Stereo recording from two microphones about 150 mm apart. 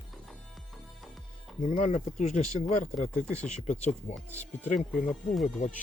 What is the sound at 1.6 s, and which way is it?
Speech, 50° left (ahead or behind).